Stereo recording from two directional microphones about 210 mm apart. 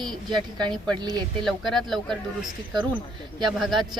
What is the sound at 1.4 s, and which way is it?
A woman's voice, centre (ahead or behind).